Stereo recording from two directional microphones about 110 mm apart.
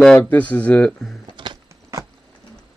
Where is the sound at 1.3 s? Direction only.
45° right (ahead or behind).